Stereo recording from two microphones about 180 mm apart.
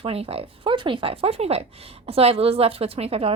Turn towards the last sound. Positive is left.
turn(degrees=-35)  # may be behind; listen again after turning